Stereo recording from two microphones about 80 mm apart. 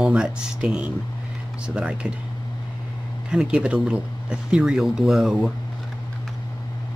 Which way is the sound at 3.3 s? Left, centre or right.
Centre.